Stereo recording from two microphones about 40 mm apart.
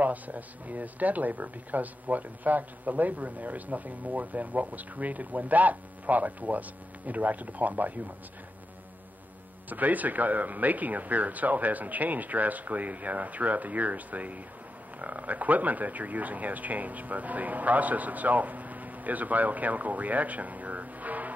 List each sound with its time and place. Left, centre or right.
0.0 s speech: right
9.7 s speech: right